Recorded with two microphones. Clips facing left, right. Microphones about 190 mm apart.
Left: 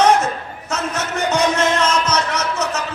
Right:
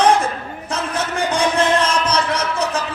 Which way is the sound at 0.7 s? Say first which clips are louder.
Even; 30° right (ahead or behind).